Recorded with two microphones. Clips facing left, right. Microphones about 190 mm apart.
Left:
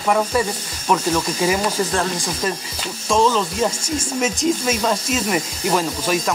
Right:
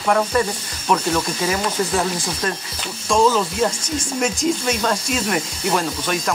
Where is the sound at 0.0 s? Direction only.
5° left (ahead or behind).